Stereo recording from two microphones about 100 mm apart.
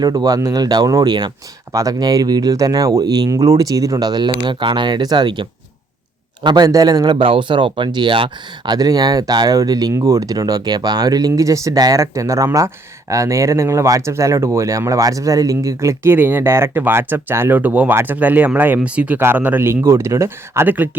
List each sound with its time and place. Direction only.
0.0 s a man's voice: 40° right (ahead or behind)
16.1 s speech: 20° right (ahead or behind)